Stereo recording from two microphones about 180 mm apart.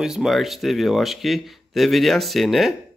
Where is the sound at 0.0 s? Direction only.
Centre (ahead or behind).